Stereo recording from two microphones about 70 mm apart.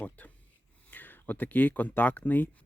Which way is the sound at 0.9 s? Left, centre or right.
Left.